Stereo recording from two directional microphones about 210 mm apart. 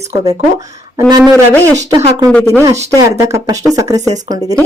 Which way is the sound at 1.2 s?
5° left (ahead or behind).